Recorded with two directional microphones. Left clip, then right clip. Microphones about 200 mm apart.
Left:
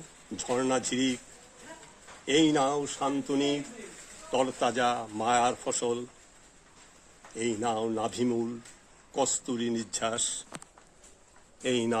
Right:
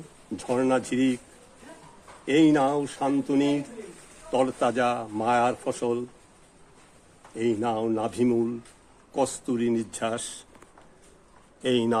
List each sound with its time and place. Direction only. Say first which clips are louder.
0.4 s speech: right 4 dB; 15° left (ahead or behind)
2.2 s speech: right 4 dB; 10° left (ahead or behind)
7.3 s speech: right 4 dB; 15° left (ahead or behind)
11.6 s speech: right 4 dB; 10° left (ahead or behind)